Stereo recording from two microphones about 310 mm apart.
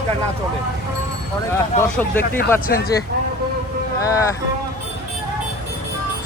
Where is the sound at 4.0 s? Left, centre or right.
Centre.